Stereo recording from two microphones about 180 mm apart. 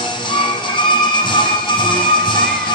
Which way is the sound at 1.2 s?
25° left (ahead or behind).